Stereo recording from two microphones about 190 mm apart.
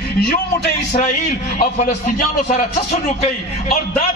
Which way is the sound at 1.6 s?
40° left (ahead or behind).